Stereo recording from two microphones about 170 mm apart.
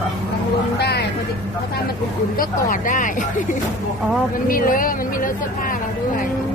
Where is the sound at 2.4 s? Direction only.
55° left (ahead or behind).